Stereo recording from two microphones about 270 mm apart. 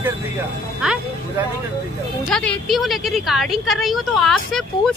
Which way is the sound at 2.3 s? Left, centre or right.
Centre.